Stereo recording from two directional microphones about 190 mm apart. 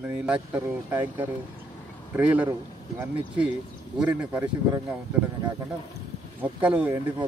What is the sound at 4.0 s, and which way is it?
A man's voice, 10° right (ahead or behind).